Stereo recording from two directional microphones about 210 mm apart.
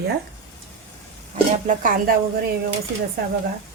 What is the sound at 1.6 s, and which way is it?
Speech, 40° right (ahead or behind).